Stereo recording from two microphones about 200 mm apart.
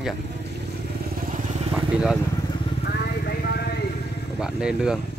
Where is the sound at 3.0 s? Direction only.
55° left (ahead or behind).